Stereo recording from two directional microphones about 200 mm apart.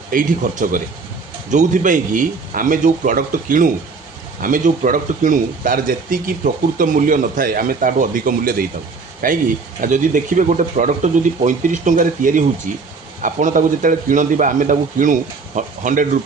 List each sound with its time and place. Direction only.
0.1 s speech: 40° right (ahead or behind)